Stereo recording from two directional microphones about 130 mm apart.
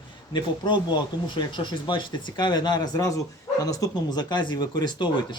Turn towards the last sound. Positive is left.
turn(degrees=35)  # may be behind; listen again after turning